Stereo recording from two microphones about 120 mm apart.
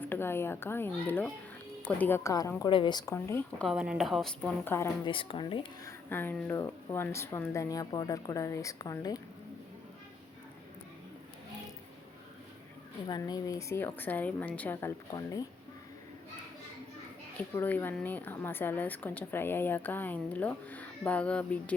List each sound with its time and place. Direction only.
0.0 s speech: 20° left (ahead or behind)
2.6 s a woman's voice: 40° left (ahead or behind)
3.1 s speech: 20° left (ahead or behind)
3.7 s a woman's voice: 5° right (ahead or behind)
4.6 s speech: 20° left (ahead or behind)
5.0 s speech: 45° left (ahead or behind)
6.1 s speech: 15° left (ahead or behind)
13.1 s a woman's voice: 35° left (ahead or behind); by 14.9 s 20° left (ahead or behind)
15.1 s speech: 30° left (ahead or behind)
17.6 s a woman's voice: 15° left (ahead or behind)